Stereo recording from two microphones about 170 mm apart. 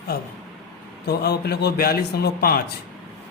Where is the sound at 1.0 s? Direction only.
70° left (ahead or behind).